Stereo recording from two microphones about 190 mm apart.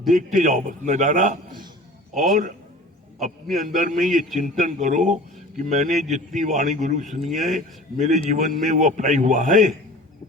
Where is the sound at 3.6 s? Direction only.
40° right (ahead or behind).